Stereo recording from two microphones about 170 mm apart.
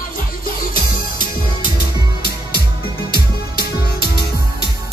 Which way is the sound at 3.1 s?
65° left (ahead or behind).